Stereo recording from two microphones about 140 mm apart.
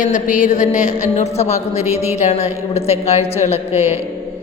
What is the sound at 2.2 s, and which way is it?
Music, 50° left (ahead or behind).